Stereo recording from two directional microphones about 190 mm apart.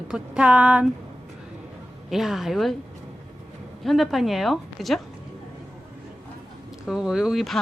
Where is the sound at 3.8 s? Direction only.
Centre (ahead or behind).